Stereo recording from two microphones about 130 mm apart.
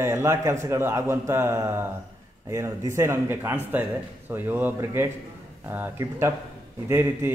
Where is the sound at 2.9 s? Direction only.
20° right (ahead or behind).